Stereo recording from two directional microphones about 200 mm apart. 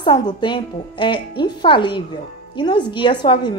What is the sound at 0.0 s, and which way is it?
A woman's voice, 20° left (ahead or behind).